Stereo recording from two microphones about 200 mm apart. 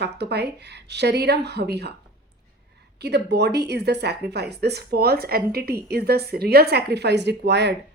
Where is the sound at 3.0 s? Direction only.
55° right (ahead or behind).